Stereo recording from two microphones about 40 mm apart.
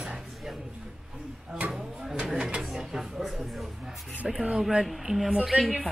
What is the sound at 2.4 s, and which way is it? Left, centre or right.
Speech, right.